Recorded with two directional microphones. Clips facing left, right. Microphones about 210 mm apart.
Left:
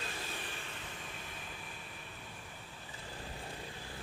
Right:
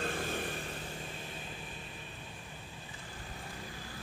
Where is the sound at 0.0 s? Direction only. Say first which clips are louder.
Right 8 dB; 50° right (ahead or behind).